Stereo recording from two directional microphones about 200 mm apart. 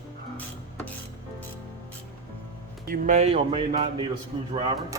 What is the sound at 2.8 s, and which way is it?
Speech, 40° right (ahead or behind).